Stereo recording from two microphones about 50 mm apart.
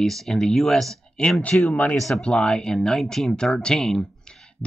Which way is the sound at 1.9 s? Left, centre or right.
Centre.